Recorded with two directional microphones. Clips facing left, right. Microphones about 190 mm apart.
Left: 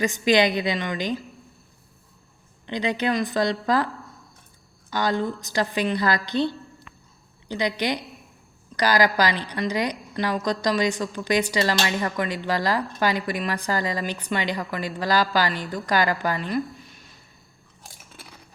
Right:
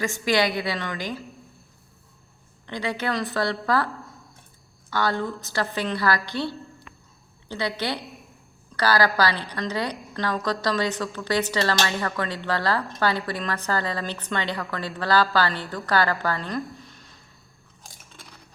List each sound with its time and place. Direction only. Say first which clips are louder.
0.0 s a woman's voice: left 3 dB; 20° left (ahead or behind)
2.6 s a woman's voice: left 3 dB; 20° left (ahead or behind)
4.9 s a woman's voice: left 1 dB; 15° left (ahead or behind)